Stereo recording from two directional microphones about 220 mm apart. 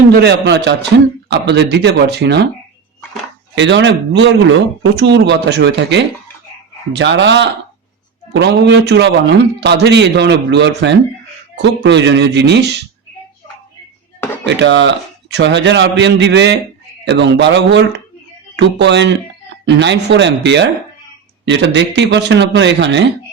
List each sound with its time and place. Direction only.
0.1 s speech: 50° right (ahead or behind)
3.5 s speech: 55° right (ahead or behind)
14.4 s speech: 55° right (ahead or behind)